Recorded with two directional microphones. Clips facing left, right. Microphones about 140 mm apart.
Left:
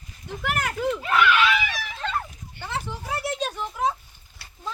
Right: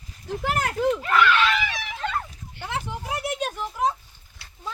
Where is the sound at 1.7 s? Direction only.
20° right (ahead or behind).